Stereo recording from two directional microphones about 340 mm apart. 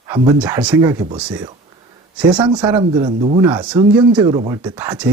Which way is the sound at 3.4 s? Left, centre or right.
Centre.